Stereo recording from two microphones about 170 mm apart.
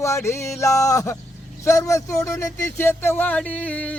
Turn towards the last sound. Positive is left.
turn(degrees=10)  # may be behind; listen again after turning